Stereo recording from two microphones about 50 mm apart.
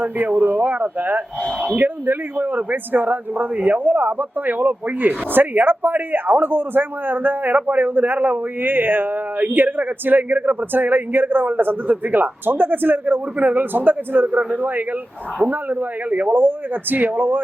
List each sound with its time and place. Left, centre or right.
0.0 s a man's voice: right